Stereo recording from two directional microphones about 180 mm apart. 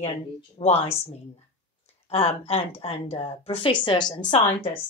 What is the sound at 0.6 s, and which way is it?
Speech, 35° left (ahead or behind).